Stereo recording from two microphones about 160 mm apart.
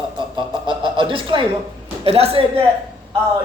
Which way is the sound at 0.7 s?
30° right (ahead or behind).